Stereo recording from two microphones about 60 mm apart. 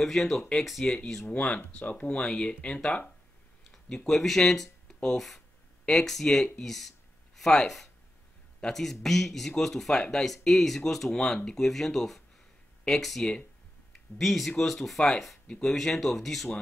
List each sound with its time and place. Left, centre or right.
0.0 s speech: centre
1.2 s speech: left
2.1 s speech: centre
3.7 s a man's voice: centre